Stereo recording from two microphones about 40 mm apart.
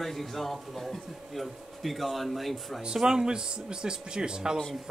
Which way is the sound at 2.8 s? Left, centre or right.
Centre.